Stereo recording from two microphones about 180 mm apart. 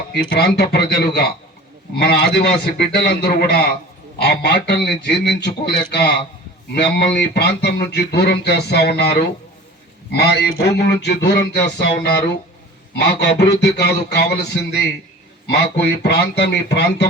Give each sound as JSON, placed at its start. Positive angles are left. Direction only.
{"t": 0.1, "sound": "a man's voice", "side_deg": 70}
{"t": 15.6, "sound": "a man's voice", "side_deg": 70}